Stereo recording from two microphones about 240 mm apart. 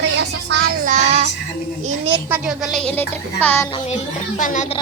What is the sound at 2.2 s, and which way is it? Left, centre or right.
Speech, centre.